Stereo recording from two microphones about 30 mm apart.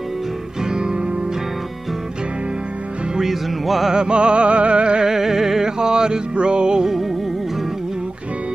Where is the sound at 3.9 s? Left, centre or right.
Right.